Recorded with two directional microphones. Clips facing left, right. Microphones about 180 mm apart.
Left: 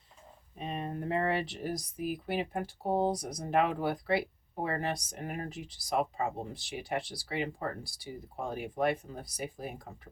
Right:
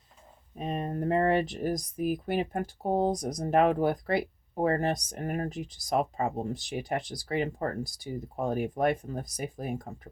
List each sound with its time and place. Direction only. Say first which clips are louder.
0.6 s speech: right 5 dB; 45° right (ahead or behind)